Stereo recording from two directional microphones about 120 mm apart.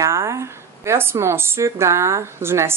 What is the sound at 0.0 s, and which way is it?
A woman's voice, 25° right (ahead or behind).